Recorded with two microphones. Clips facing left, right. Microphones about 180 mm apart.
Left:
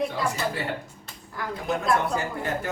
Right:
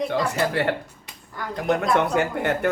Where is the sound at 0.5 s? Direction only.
70° right (ahead or behind).